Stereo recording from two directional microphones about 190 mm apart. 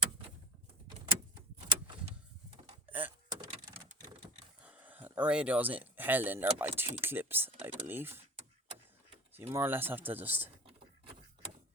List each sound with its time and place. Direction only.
1.5 s vehicle: 30° right (ahead or behind)
2.9 s speech: 10° right (ahead or behind)
3.2 s vehicle: 20° right (ahead or behind)
4.6 s speech: 10° right (ahead or behind)
9.5 s speech: 10° right (ahead or behind)